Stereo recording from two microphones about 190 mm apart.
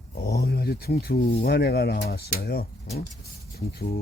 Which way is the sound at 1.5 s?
60° left (ahead or behind).